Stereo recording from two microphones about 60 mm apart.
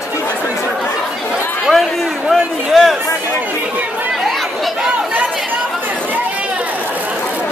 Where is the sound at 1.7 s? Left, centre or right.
Centre.